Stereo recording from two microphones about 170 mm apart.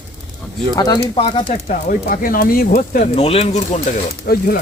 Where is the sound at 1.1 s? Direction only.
35° left (ahead or behind).